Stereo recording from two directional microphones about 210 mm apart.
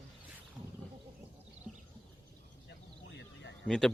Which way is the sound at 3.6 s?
5° left (ahead or behind).